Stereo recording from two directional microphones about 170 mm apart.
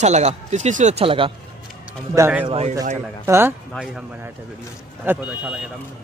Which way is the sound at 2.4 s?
35° right (ahead or behind).